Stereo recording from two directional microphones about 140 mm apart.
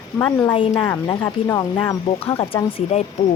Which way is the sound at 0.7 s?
15° left (ahead or behind).